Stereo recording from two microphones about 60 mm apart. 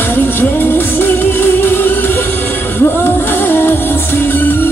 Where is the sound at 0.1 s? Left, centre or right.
Left.